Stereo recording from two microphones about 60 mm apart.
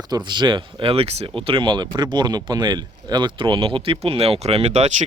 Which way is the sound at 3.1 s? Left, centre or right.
Right.